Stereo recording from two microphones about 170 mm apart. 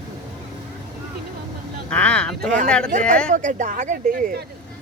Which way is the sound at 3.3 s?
50° right (ahead or behind).